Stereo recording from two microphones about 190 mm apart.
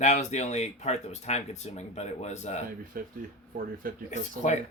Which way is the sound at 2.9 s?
50° right (ahead or behind).